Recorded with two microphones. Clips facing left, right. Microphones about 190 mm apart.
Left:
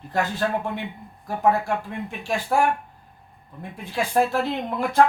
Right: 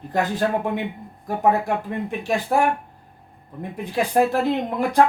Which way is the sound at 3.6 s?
20° right (ahead or behind).